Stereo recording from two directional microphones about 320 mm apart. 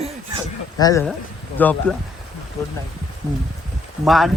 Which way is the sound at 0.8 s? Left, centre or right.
Centre.